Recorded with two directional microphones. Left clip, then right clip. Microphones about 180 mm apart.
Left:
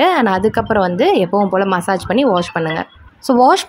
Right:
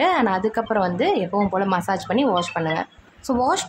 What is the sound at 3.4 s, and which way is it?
Speech, 35° left (ahead or behind).